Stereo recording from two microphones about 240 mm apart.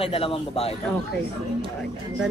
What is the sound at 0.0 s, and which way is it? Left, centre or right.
Speech, left.